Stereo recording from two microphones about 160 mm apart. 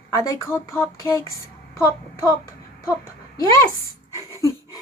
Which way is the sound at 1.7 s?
20° left (ahead or behind).